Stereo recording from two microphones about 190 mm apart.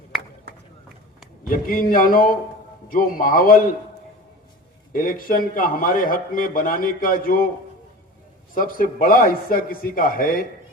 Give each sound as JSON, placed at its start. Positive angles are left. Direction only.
{"t": 1.5, "sound": "a man's voice", "side_deg": 50}
{"t": 4.9, "sound": "a man's voice", "side_deg": 50}
{"t": 8.5, "sound": "a man's voice", "side_deg": 50}